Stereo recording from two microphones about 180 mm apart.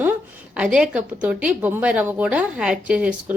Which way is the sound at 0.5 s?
5° right (ahead or behind).